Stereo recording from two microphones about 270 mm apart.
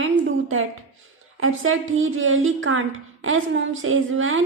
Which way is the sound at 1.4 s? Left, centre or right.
Right.